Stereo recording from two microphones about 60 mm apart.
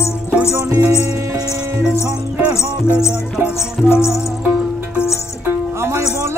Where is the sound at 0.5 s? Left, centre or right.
Right.